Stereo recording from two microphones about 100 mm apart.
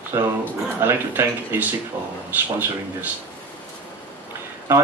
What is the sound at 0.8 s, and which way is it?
Speech, 20° right (ahead or behind).